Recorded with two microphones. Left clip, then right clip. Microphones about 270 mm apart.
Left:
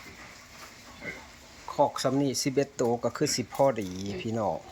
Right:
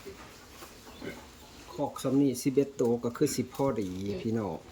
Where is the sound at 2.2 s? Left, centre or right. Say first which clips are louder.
Even; centre.